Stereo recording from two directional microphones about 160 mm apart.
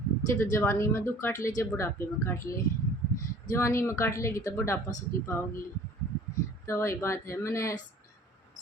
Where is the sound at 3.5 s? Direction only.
15° left (ahead or behind).